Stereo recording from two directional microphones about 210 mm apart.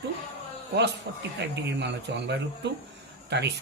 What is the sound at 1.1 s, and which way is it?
Speech, 55° right (ahead or behind).